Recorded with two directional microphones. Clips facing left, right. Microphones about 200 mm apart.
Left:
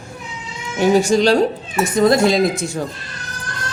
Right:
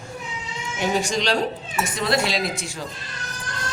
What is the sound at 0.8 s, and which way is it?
Speech, 40° left (ahead or behind).